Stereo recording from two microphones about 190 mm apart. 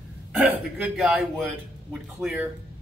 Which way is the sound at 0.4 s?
5° right (ahead or behind).